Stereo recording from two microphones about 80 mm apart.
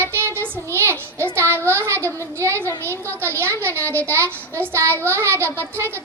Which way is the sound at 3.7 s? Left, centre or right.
Left.